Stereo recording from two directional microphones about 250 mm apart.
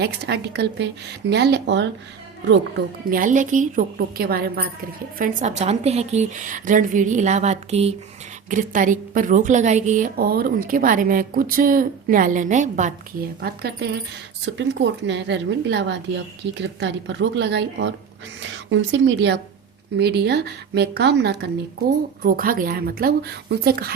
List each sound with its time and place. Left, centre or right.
0.0 s a woman's voice: right